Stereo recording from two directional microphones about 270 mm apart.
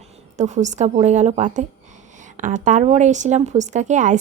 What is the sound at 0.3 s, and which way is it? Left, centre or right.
Speech, right.